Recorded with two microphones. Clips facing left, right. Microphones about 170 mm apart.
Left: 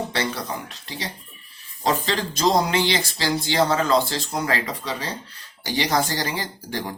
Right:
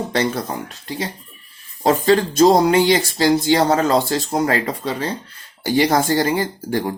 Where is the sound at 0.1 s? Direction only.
45° right (ahead or behind).